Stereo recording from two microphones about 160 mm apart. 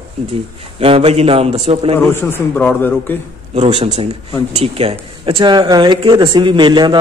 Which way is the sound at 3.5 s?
40° right (ahead or behind).